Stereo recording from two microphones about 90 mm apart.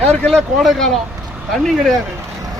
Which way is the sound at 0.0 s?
15° left (ahead or behind).